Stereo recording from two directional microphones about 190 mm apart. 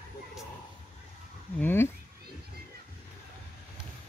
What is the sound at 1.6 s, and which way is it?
Wild animals, 10° left (ahead or behind).